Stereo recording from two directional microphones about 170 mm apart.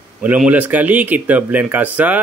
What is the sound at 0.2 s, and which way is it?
Speech, 10° right (ahead or behind).